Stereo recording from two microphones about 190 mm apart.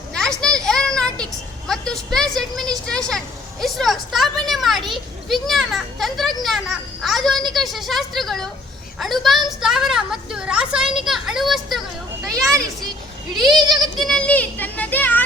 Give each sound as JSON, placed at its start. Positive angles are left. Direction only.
{"t": 0.1, "sound": "children playing", "side_deg": 5}
{"t": 1.2, "sound": "a woman's voice", "side_deg": 5}
{"t": 12.5, "sound": "a child's voice", "side_deg": -15}
{"t": 14.0, "sound": "a child's voice", "side_deg": 5}